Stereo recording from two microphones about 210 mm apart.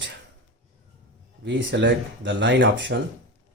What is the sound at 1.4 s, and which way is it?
Speech, 60° right (ahead or behind).